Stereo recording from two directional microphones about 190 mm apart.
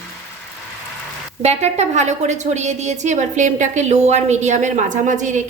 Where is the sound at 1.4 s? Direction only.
35° right (ahead or behind).